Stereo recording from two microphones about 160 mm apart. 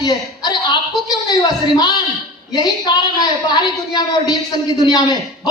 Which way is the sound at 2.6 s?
25° left (ahead or behind).